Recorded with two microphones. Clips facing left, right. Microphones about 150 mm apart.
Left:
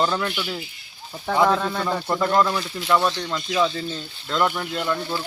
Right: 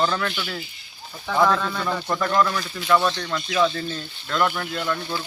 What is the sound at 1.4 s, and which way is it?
Speech, 25° left (ahead or behind).